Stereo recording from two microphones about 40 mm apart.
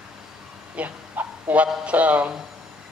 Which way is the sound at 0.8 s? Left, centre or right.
Right.